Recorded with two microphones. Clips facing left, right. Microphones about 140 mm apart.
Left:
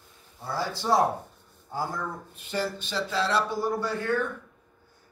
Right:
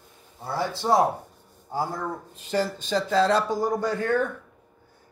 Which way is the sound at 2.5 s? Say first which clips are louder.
Right 5 dB; 45° right (ahead or behind).